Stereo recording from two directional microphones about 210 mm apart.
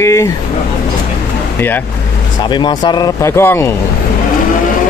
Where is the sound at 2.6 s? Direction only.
20° left (ahead or behind).